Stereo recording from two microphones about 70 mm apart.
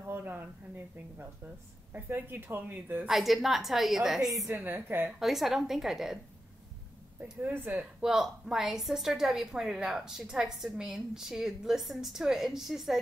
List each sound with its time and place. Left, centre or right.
0.0 s a woman's voice: right
3.1 s a woman's voice: centre
4.5 s a woman's voice: right
5.0 s a woman's voice: centre
7.4 s a woman's voice: right
8.0 s a woman's voice: centre